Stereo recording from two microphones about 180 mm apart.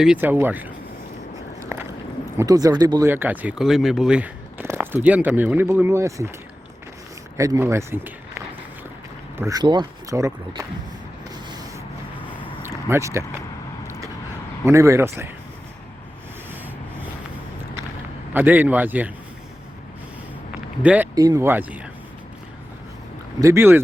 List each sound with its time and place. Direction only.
0.0 s speech: 5° right (ahead or behind)
2.4 s speech: 20° right (ahead or behind)
7.3 s speech: 15° right (ahead or behind)
9.4 s speech: 20° right (ahead or behind)
12.6 s a sound: 15° right (ahead or behind)
14.6 s speech: 15° right (ahead or behind)
18.3 s speech: 10° right (ahead or behind)
20.8 s speech: 5° right (ahead or behind)
21.2 s speech: 20° right (ahead or behind)
23.4 s speech: 15° right (ahead or behind)